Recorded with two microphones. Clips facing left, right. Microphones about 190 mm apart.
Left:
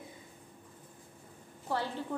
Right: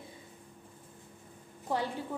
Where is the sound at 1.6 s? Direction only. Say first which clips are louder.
Right 1 dB; 15° right (ahead or behind).